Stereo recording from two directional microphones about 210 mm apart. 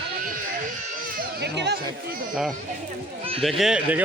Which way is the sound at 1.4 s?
50° right (ahead or behind).